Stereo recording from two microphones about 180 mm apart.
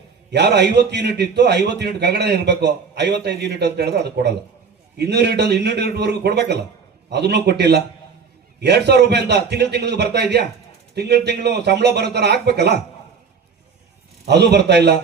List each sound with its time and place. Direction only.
0.3 s a man's voice: 70° right (ahead or behind)
14.3 s a man's voice: 65° right (ahead or behind)